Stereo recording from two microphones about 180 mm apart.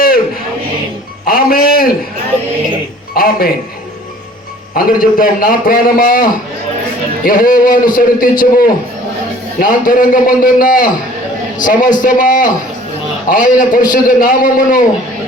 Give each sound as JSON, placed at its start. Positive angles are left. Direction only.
{"t": 1.3, "sound": "a sound", "side_deg": 55}
{"t": 3.2, "sound": "music", "side_deg": 55}
{"t": 4.7, "sound": "a man's voice", "side_deg": 55}